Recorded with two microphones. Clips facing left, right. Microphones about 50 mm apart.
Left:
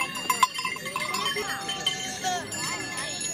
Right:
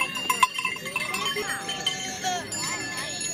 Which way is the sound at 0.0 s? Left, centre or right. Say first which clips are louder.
Right 1 dB; right.